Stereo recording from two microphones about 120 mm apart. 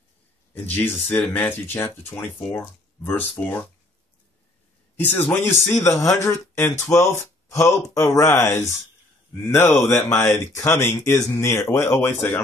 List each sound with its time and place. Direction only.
0.7 s speech: 20° left (ahead or behind)
4.9 s speech: 15° left (ahead or behind)